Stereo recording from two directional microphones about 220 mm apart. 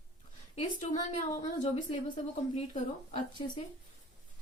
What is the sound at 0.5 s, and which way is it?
A woman's voice, 30° left (ahead or behind).